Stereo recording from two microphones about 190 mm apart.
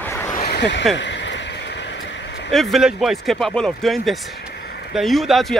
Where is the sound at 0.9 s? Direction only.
70° left (ahead or behind).